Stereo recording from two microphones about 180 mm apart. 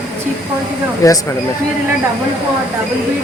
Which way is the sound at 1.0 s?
20° left (ahead or behind).